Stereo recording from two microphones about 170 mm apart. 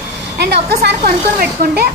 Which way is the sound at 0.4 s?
75° right (ahead or behind).